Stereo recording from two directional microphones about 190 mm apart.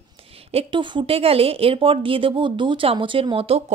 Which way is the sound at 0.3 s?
30° right (ahead or behind).